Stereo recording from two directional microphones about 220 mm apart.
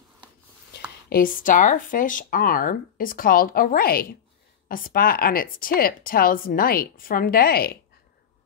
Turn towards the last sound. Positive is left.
turn(degrees=45)  # may be behind; listen again after turning